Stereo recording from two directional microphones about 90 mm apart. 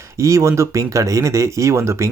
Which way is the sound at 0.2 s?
35° right (ahead or behind).